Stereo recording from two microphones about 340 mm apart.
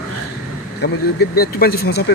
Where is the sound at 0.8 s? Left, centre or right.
Left.